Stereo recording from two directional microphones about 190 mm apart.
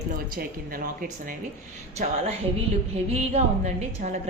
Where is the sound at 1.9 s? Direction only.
35° right (ahead or behind).